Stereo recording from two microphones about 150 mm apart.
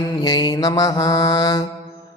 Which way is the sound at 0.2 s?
30° left (ahead or behind).